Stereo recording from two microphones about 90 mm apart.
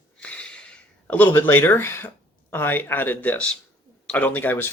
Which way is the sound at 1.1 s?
20° left (ahead or behind).